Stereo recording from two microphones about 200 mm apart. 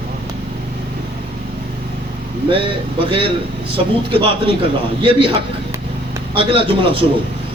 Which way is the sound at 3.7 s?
25° right (ahead or behind).